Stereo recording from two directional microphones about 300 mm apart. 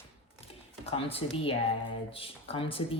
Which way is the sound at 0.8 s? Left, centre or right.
Centre.